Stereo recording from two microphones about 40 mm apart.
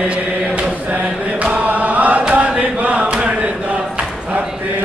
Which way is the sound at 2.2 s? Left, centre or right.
Right.